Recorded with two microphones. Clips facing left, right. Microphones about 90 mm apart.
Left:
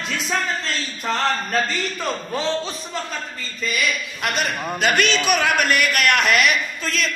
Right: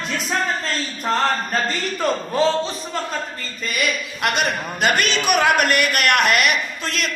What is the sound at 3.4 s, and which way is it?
Speech, 55° right (ahead or behind).